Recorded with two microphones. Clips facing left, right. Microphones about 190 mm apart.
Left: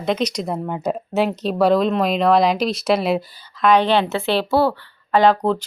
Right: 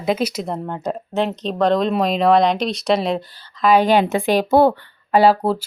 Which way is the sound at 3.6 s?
10° right (ahead or behind).